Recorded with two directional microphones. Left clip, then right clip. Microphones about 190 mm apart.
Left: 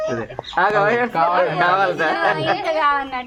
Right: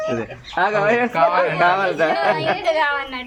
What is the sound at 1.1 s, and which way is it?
Speech, 50° left (ahead or behind).